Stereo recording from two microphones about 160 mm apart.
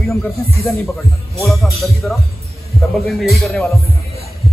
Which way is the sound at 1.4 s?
Centre (ahead or behind).